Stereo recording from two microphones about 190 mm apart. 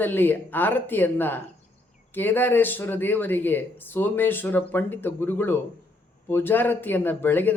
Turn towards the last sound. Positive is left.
turn(degrees=10)  # may be behind; listen again after turning